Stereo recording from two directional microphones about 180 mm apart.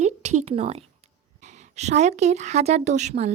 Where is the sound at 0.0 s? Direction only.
40° right (ahead or behind).